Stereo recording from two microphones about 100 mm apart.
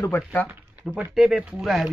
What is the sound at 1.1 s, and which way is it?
Speech, 5° right (ahead or behind).